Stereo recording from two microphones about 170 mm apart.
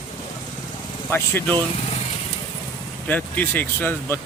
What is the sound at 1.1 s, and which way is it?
Speech, 15° left (ahead or behind).